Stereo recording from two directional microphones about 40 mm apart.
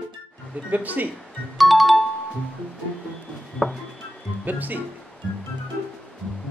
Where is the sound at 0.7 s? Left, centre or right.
Right.